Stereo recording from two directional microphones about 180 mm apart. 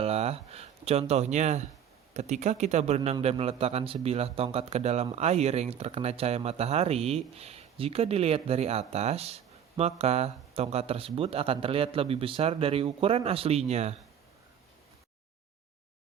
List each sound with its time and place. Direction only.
0.0 s speech: 35° right (ahead or behind)